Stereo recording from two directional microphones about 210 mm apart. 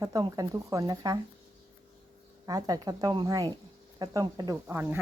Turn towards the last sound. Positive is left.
turn(degrees=-10)  # may be behind; listen again after turning